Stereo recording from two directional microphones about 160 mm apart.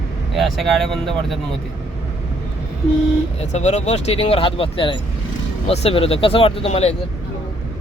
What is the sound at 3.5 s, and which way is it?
Speech, 45° left (ahead or behind).